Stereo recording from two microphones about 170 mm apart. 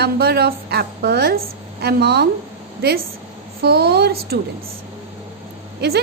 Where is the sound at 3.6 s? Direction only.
70° right (ahead or behind).